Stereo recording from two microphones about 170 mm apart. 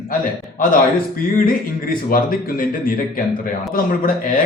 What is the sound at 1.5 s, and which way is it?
A man's voice, 55° left (ahead or behind).